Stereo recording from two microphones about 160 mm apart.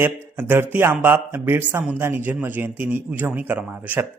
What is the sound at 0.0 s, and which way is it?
A man's voice, 15° right (ahead or behind).